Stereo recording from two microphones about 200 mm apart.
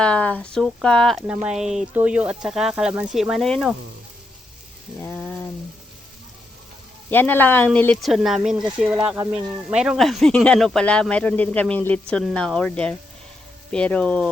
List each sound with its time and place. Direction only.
0.0 s speech: 5° left (ahead or behind)
4.9 s a sound: 5° left (ahead or behind)
7.1 s speech: 10° left (ahead or behind); by 9.7 s 15° right (ahead or behind)
9.7 s speech: 5° right (ahead or behind)